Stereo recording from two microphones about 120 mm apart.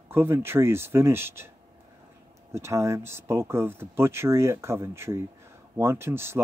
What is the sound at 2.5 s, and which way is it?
Speech, 25° right (ahead or behind).